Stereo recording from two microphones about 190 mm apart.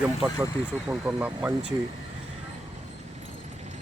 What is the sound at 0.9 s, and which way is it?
Speech, 10° right (ahead or behind).